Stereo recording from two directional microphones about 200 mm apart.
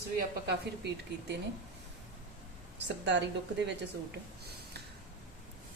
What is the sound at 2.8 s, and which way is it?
Speech, 60° right (ahead or behind).